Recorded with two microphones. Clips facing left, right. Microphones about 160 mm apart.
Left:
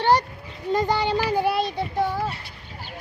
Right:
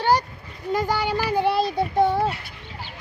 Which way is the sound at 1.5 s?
30° right (ahead or behind).